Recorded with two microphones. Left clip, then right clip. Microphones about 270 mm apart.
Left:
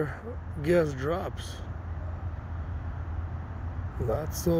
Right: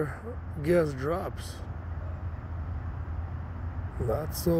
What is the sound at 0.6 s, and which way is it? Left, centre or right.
Speech, centre.